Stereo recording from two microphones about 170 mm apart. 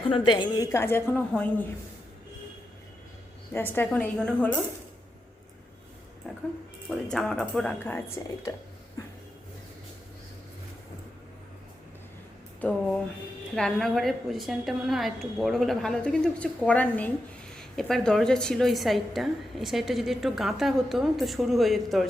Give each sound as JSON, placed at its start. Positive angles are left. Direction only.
{"t": 0.0, "sound": "a woman's voice", "side_deg": 30}
{"t": 3.5, "sound": "a woman's voice", "side_deg": 15}
{"t": 6.3, "sound": "music", "side_deg": 0}
{"t": 6.8, "sound": "a woman's voice", "side_deg": 0}
{"t": 9.0, "sound": "a sound", "side_deg": 20}
{"t": 12.5, "sound": "a woman's voice", "side_deg": 10}